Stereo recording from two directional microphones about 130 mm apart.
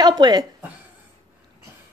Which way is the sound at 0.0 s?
35° right (ahead or behind).